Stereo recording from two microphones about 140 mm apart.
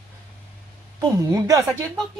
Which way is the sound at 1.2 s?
25° right (ahead or behind).